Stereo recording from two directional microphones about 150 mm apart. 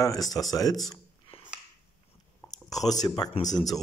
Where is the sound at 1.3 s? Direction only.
40° left (ahead or behind).